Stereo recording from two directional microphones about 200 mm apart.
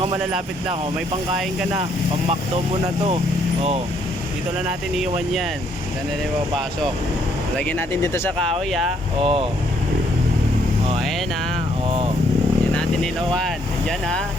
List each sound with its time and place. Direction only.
7.6 s speech: 10° left (ahead or behind)
9.2 s speech: 30° right (ahead or behind)
11.9 s speech: 30° right (ahead or behind)
12.7 s speech: 5° left (ahead or behind)